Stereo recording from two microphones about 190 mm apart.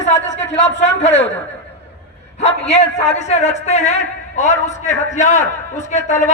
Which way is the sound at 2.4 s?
35° left (ahead or behind).